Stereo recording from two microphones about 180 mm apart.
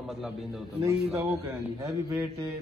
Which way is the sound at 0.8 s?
15° right (ahead or behind).